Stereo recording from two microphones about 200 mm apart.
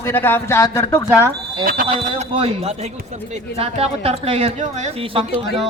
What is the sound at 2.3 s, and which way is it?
Speech, 30° right (ahead or behind).